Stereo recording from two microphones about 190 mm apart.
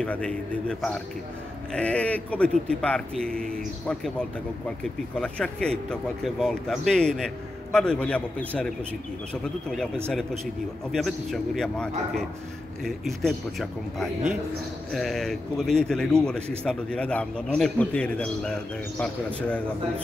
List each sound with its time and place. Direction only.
0.0 s a man's voice: 5° left (ahead or behind)